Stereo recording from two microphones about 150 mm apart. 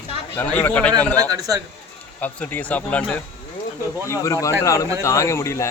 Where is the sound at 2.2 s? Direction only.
10° left (ahead or behind).